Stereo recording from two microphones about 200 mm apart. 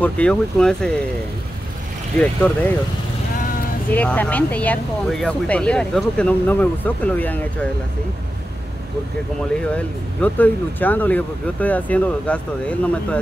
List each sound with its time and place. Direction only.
0.0 s speech: 5° left (ahead or behind)
2.1 s speech: 5° left (ahead or behind)
3.9 s speech: 5° left (ahead or behind)
9.8 s speech: 10° left (ahead or behind)